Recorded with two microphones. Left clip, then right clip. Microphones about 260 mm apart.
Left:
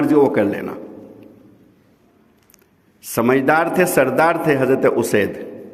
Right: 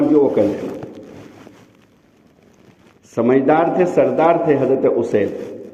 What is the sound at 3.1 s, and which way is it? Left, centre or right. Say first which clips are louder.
A man's voice: right 1 dB; left.